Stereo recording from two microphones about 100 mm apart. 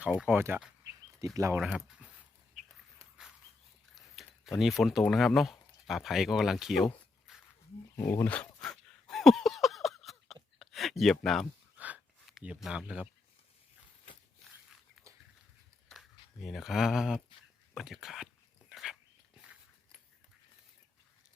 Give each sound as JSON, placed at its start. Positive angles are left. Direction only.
{"t": 0.0, "sound": "speech", "side_deg": -15}
{"t": 1.5, "sound": "speech", "side_deg": -5}
{"t": 3.9, "sound": "a sound", "side_deg": 0}
{"t": 5.1, "sound": "speech", "side_deg": 0}
{"t": 7.9, "sound": "speech", "side_deg": 30}
{"t": 8.3, "sound": "dog", "side_deg": 15}
{"t": 8.6, "sound": "a sound", "side_deg": 5}
{"t": 10.6, "sound": "speech", "side_deg": 0}
{"t": 12.5, "sound": "speech", "side_deg": -5}
{"t": 15.9, "sound": "speech", "side_deg": 0}
{"t": 18.7, "sound": "dog", "side_deg": -5}